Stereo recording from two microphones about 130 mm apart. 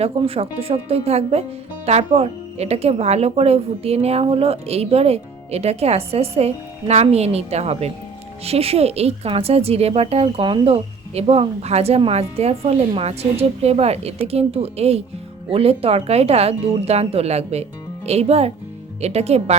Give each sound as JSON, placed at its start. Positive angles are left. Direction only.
{"t": 0.2, "sound": "speech", "side_deg": -45}